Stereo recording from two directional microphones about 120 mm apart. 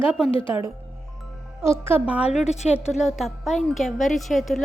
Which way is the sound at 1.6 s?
20° right (ahead or behind).